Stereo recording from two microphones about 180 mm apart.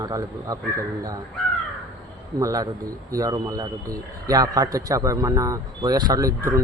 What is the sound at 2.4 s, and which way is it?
Speech, 20° right (ahead or behind).